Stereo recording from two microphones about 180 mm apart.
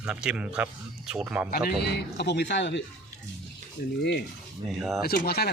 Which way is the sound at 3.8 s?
60° left (ahead or behind).